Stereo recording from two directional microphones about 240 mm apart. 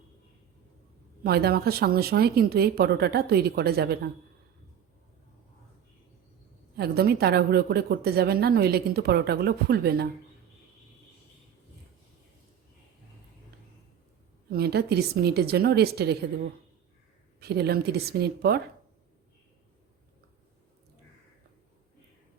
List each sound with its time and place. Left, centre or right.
1.2 s speech: right
6.7 s speech: right
14.5 s speech: right
17.4 s speech: right